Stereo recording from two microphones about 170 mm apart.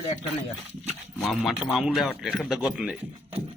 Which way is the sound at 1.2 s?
Centre (ahead or behind).